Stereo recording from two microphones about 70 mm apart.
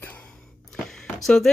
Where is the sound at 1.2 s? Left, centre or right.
Centre.